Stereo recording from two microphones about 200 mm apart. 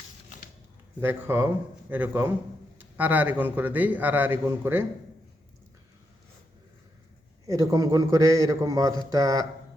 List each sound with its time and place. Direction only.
1.0 s a man's voice: 10° right (ahead or behind)
7.4 s a man's voice: 15° right (ahead or behind)